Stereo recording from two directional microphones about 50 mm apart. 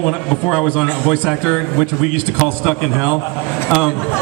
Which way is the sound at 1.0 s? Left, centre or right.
Right.